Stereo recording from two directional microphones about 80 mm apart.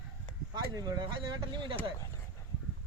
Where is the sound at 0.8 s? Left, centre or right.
Right.